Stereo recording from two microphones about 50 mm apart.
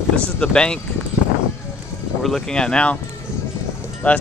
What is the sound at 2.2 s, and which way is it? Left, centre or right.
Speech, centre.